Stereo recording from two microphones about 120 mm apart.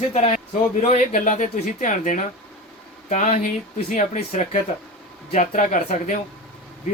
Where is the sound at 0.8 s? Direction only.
85° left.